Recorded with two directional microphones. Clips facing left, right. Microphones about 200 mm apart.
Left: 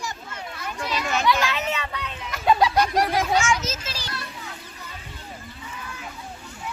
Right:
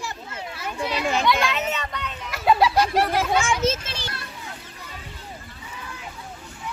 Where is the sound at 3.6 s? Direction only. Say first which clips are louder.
Right 8 dB; 25° right (ahead or behind).